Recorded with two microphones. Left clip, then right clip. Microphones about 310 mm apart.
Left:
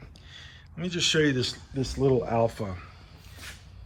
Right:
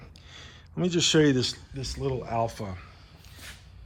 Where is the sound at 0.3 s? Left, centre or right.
Right; by 2.9 s centre.